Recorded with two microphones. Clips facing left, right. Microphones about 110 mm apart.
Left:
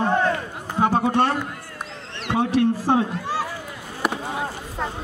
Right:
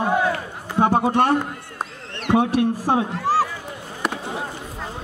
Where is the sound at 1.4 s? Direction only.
45° right (ahead or behind).